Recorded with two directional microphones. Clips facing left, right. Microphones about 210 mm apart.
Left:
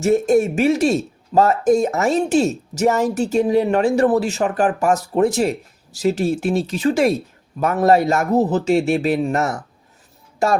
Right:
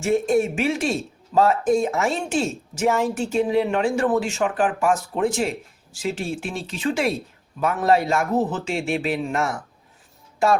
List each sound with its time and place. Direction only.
0.0 s speech: 40° left (ahead or behind)